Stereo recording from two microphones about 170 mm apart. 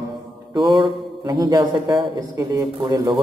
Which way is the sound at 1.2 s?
20° right (ahead or behind).